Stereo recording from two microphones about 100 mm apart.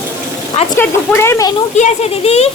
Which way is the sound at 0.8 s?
20° left (ahead or behind).